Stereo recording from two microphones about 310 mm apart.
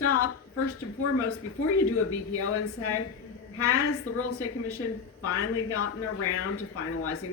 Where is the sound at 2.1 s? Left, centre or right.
Left.